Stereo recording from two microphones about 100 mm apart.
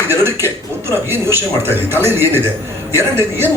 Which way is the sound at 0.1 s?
25° right (ahead or behind).